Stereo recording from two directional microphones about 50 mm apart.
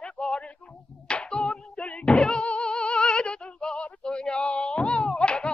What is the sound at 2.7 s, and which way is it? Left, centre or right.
Female singing, centre.